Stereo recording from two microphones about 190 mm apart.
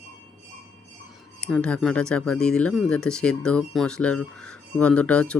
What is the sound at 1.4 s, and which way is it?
Speech, 5° left (ahead or behind).